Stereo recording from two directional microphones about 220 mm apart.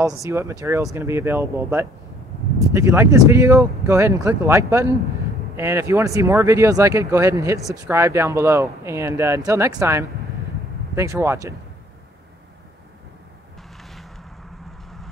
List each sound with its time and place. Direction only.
0.0 s speech: 15° right (ahead or behind)